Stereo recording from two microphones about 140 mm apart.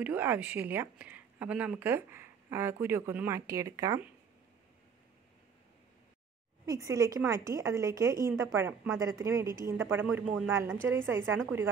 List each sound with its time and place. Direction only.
0.0 s a woman's voice: 15° right (ahead or behind)
6.6 s a woman's voice: 25° right (ahead or behind)